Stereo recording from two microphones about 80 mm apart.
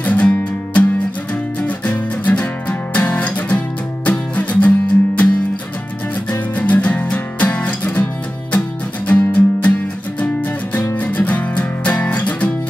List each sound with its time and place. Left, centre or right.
0.0 s music: centre
6.6 s music: centre
11.0 s music: centre